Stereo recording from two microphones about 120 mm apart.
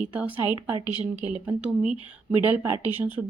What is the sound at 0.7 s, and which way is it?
Speech, 40° left (ahead or behind).